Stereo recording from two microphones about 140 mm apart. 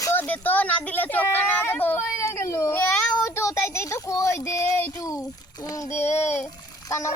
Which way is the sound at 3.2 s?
20° left (ahead or behind).